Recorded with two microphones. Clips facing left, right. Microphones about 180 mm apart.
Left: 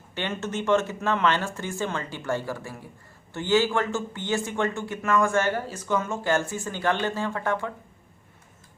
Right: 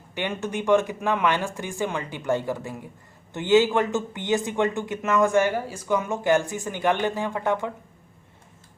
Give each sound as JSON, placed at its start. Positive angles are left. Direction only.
{"t": 0.1, "sound": "speech", "side_deg": -15}